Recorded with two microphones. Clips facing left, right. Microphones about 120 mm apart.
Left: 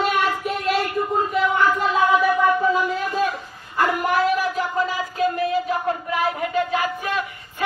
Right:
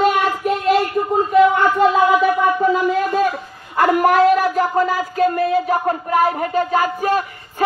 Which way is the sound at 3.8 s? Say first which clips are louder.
Right 7 dB; 55° right (ahead or behind).